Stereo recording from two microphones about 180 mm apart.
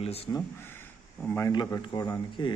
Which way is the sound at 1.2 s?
15° left (ahead or behind).